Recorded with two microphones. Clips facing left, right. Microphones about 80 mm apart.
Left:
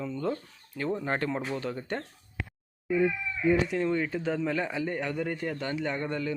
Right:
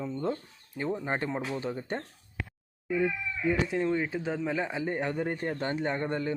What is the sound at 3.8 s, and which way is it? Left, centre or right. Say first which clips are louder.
A man's voice: left 1 dB; centre.